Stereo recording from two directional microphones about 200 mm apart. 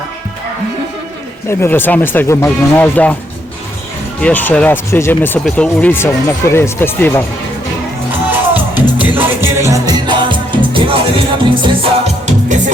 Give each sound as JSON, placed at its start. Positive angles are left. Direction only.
{"t": 1.5, "sound": "speech", "side_deg": 10}
{"t": 4.2, "sound": "speech", "side_deg": 10}
{"t": 8.1, "sound": "music", "side_deg": -10}